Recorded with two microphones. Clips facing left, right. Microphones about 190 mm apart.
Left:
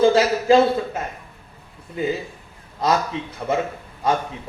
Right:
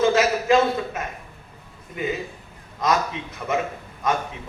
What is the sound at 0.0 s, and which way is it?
A man's voice, 30° left (ahead or behind).